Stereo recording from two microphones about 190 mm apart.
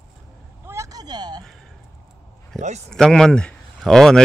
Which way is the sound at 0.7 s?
15° right (ahead or behind).